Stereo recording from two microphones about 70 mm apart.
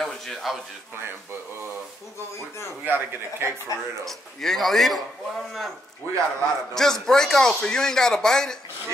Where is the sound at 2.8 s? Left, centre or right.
Right.